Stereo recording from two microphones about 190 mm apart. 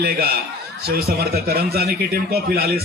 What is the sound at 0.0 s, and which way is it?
Speech, 55° right (ahead or behind).